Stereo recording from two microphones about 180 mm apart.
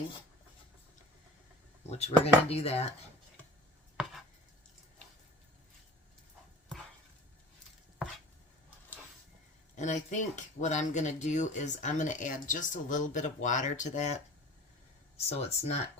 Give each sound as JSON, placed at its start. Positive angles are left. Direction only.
{"t": 1.9, "sound": "speech", "side_deg": 35}
{"t": 9.7, "sound": "speech", "side_deg": 40}
{"t": 15.3, "sound": "speech", "side_deg": 35}